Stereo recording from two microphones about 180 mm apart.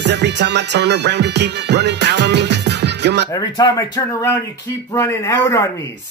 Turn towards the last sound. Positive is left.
turn(degrees=20)  # may be behind; listen again after turning